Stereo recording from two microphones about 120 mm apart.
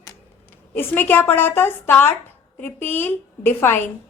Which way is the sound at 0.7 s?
15° left (ahead or behind).